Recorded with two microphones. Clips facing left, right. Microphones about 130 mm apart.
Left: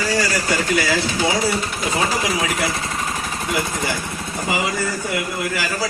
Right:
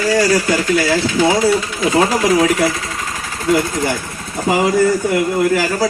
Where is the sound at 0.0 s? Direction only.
35° left (ahead or behind).